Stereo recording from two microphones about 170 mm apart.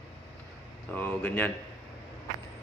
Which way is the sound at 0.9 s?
10° left (ahead or behind).